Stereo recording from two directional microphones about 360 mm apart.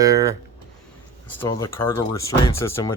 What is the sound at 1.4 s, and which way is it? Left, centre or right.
Speech, centre.